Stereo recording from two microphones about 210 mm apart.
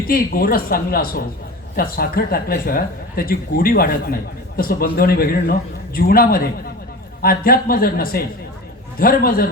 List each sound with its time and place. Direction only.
0.1 s speech: 45° left (ahead or behind)